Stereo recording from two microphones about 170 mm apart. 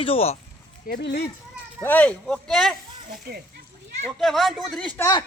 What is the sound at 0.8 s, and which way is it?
Speech, 65° left (ahead or behind).